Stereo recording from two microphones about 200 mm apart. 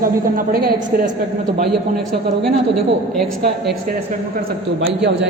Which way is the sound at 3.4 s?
50° right (ahead or behind).